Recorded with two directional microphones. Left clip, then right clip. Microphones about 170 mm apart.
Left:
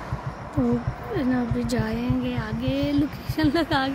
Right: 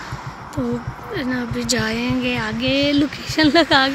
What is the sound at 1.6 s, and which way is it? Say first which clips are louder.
Speech: right 6 dB; 5° left (ahead or behind).